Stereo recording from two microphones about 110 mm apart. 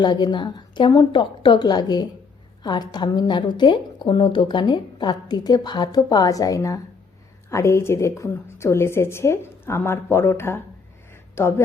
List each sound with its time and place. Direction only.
0.0 s a woman's voice: 40° left (ahead or behind); by 11.6 s 25° left (ahead or behind)